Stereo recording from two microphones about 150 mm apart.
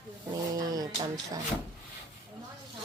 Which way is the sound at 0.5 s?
25° right (ahead or behind).